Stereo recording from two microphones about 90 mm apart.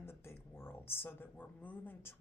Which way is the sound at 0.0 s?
25° left (ahead or behind).